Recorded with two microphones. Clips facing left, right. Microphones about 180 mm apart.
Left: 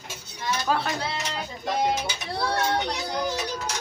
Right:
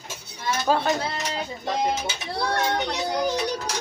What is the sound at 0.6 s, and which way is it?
Speech, 25° right (ahead or behind).